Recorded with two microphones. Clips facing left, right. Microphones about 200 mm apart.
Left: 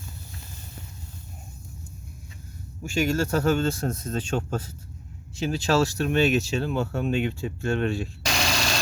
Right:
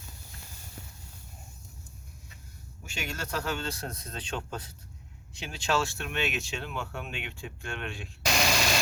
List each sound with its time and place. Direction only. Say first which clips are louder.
2.9 s a man's voice: left 12 dB; 45° left (ahead or behind)
8.2 s engine: right 3 dB; 5° right (ahead or behind)